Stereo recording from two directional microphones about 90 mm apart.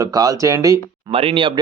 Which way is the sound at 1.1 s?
90° right.